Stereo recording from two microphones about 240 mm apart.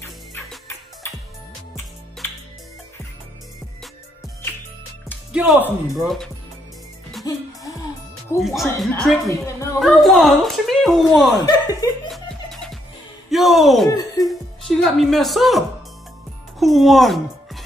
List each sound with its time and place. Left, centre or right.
0.0 s music: centre
5.3 s a woman's voice: centre
7.2 s music: centre
8.4 s a woman's voice: centre
11.4 s speech: centre
12.1 s music: centre
13.3 s a woman's voice: centre
13.8 s speech: centre
14.2 s speech: centre
16.5 s music: centre